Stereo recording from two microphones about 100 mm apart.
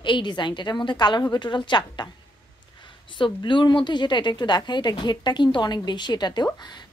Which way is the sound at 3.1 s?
55° left (ahead or behind).